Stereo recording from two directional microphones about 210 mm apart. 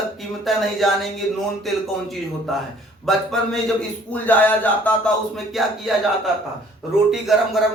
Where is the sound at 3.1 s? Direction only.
Centre (ahead or behind).